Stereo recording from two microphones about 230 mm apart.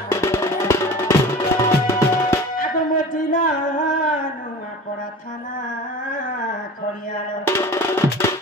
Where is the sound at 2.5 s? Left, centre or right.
Left.